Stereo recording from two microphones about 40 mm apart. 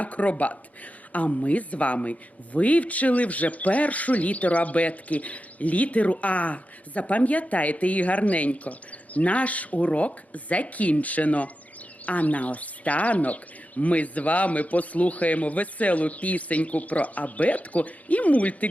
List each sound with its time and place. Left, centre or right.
0.0 s speech: left